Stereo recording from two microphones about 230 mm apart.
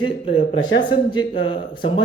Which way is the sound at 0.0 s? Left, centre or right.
Left.